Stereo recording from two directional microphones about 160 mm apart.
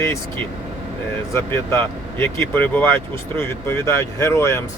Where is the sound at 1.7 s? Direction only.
15° left (ahead or behind).